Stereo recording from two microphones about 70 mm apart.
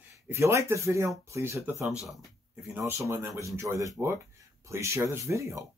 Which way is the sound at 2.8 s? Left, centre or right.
Right.